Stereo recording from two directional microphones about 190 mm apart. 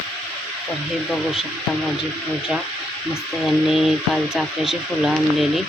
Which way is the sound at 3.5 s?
Centre (ahead or behind).